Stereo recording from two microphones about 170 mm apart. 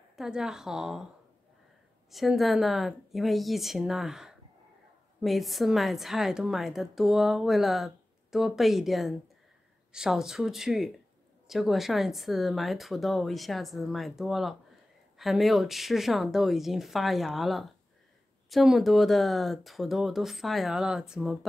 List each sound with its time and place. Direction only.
0.1 s a woman's voice: 5° right (ahead or behind)
2.0 s a woman's voice: centre (ahead or behind)